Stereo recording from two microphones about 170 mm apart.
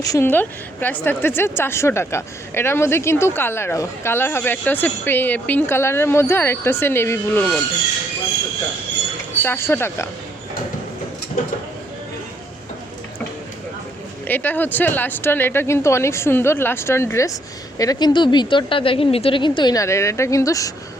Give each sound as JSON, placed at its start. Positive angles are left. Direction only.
{"t": 0.0, "sound": "a woman's voice", "side_deg": 20}
{"t": 9.4, "sound": "a woman's voice", "side_deg": 15}
{"t": 14.3, "sound": "a woman's voice", "side_deg": 10}